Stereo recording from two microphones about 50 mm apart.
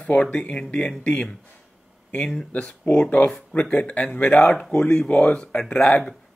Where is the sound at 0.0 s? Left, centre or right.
Left.